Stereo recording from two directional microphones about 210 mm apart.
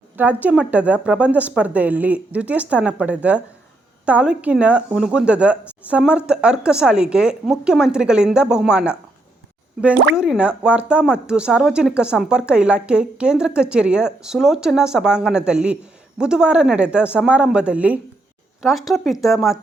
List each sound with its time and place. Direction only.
0.2 s a woman's voice: 10° right (ahead or behind)
10.2 s speech: 5° right (ahead or behind)